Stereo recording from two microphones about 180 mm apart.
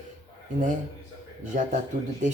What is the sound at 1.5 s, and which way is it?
Speech, 50° right (ahead or behind).